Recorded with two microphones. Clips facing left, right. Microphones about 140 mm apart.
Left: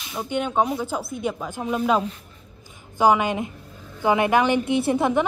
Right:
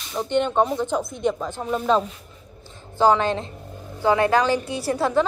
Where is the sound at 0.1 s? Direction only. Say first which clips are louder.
Right 3 dB; 5° left (ahead or behind).